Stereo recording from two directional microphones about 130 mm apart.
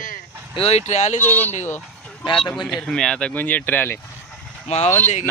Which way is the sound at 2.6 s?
5° left (ahead or behind).